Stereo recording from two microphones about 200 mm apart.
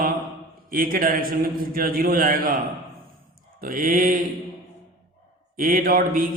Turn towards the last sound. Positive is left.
turn(degrees=-45)  # may be behind; listen again after turning